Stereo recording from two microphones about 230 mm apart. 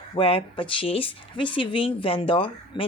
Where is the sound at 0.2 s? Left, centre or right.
Left.